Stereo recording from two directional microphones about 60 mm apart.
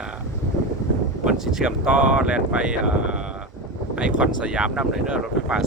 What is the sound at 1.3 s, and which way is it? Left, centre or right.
Speech, centre.